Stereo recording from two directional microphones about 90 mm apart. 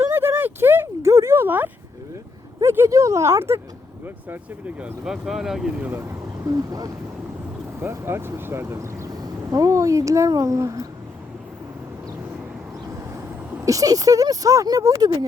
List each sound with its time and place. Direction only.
0.1 s a sound: 25° right (ahead or behind)
2.6 s speech: 30° right (ahead or behind); by 5.6 s 5° right (ahead or behind)
5.8 s speech: 25° right (ahead or behind); by 6.9 s 45° right (ahead or behind)
7.8 s speech: 30° right (ahead or behind)
9.0 s speech: 45° right (ahead or behind)
12.9 s vehicle: 25° right (ahead or behind)
13.7 s speech: 40° right (ahead or behind)